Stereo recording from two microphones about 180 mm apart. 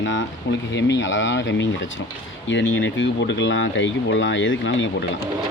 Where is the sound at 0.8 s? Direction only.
85° left.